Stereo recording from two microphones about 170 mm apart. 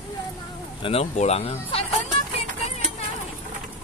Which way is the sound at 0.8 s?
35° left (ahead or behind).